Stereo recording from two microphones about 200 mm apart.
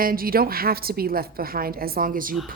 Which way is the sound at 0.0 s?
45° right (ahead or behind).